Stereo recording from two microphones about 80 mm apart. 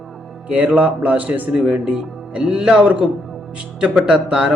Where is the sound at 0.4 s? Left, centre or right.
Centre.